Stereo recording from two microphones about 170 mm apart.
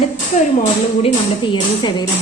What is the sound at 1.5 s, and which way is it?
Speech, 25° left (ahead or behind).